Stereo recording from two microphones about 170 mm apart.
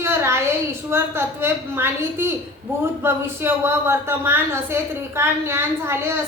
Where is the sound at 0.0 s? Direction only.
15° right (ahead or behind).